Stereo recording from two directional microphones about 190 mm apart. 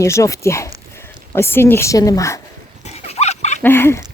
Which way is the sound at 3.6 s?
10° left (ahead or behind).